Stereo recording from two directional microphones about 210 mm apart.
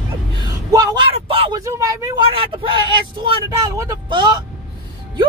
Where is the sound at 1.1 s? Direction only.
25° right (ahead or behind).